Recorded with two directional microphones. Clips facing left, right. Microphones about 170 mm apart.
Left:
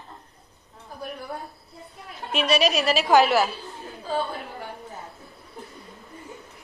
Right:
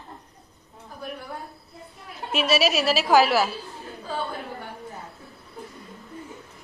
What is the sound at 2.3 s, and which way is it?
A woman's voice, 5° right (ahead or behind).